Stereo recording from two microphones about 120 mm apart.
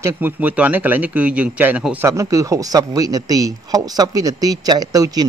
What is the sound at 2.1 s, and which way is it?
A man's voice, 25° right (ahead or behind).